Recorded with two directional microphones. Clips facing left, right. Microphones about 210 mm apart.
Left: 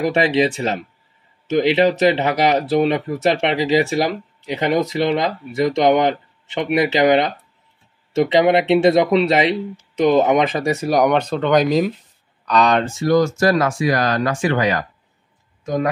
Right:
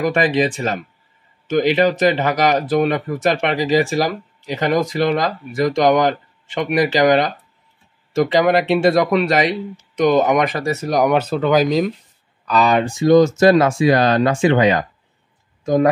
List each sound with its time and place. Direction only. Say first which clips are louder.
0.0 s speech: even; 25° left (ahead or behind)
10.1 s speech: left 1 dB; 25° left (ahead or behind)
10.9 s speech: even; centre (ahead or behind)
12.9 s speech: right 4 dB; 20° right (ahead or behind)